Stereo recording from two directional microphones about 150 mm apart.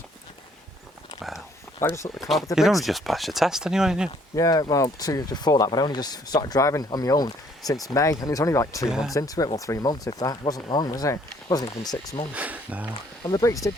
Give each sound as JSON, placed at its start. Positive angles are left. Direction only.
{"t": 1.8, "sound": "speech", "side_deg": 20}
{"t": 2.1, "sound": "speech", "side_deg": 0}
{"t": 4.4, "sound": "speech", "side_deg": 20}
{"t": 8.9, "sound": "speech", "side_deg": -5}
{"t": 9.1, "sound": "speech", "side_deg": 25}
{"t": 12.3, "sound": "speech", "side_deg": -10}
{"t": 13.2, "sound": "speech", "side_deg": 25}